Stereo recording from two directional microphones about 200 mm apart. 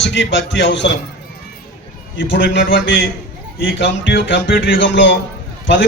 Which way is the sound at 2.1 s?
65° left (ahead or behind).